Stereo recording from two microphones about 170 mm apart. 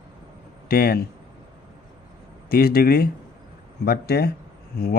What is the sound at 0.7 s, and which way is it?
Speech, 60° left (ahead or behind).